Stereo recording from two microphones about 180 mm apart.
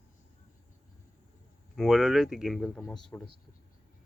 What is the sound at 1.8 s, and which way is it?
Speech, centre (ahead or behind).